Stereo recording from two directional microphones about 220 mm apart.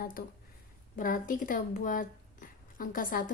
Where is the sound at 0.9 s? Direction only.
40° left (ahead or behind).